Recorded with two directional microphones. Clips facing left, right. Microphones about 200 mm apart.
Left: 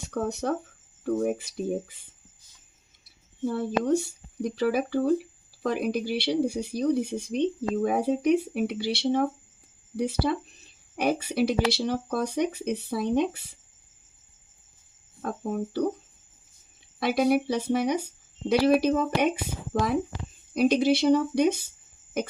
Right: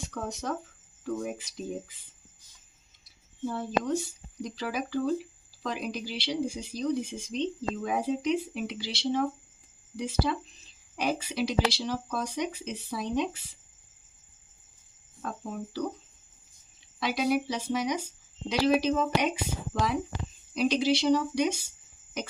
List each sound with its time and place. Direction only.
0.1 s speech: 60° left (ahead or behind)
1.0 s speech: 50° left (ahead or behind)
3.5 s speech: 60° left (ahead or behind)
15.2 s speech: 50° left (ahead or behind)
17.0 s speech: 55° left (ahead or behind)
22.2 s a sound: 55° left (ahead or behind)